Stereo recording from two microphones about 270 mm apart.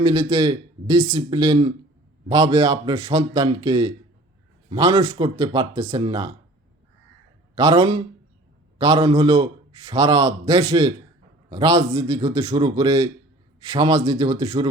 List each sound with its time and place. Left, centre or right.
0.0 s a man's voice: centre
7.5 s a man's voice: centre